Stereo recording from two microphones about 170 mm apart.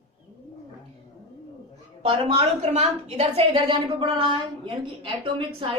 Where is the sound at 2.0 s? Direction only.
35° right (ahead or behind).